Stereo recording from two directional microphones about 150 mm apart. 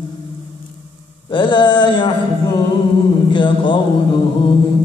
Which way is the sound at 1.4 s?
30° left (ahead or behind).